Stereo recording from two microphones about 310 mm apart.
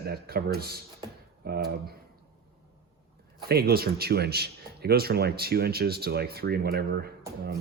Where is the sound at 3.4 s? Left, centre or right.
Right.